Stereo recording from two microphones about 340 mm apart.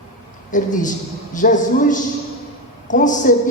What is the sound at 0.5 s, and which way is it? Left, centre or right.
Speech, left.